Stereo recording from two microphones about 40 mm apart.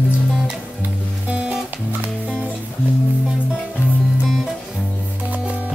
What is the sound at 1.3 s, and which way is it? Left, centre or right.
Music, right.